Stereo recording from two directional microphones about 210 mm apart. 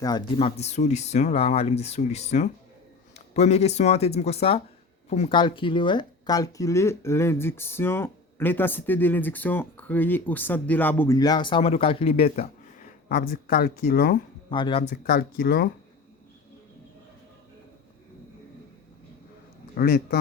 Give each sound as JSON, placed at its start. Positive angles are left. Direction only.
{"t": 0.0, "sound": "speech", "side_deg": 25}
{"t": 12.4, "sound": "speech", "side_deg": 45}
{"t": 14.5, "sound": "speech", "side_deg": 25}
{"t": 14.8, "sound": "speech", "side_deg": 45}
{"t": 19.7, "sound": "speech", "side_deg": 45}